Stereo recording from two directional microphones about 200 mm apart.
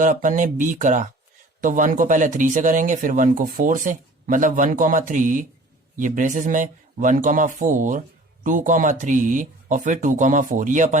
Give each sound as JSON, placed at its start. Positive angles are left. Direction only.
{"t": 0.0, "sound": "speech", "side_deg": -40}